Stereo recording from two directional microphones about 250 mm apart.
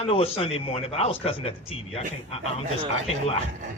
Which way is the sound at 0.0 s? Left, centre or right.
Left.